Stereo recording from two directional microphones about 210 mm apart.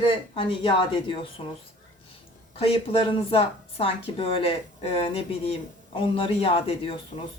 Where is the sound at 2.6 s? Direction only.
25° left (ahead or behind).